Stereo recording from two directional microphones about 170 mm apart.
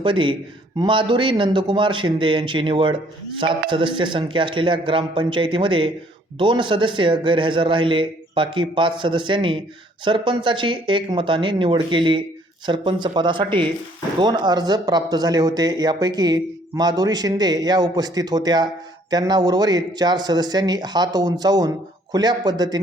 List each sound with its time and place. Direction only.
0.0 s speech: 30° right (ahead or behind)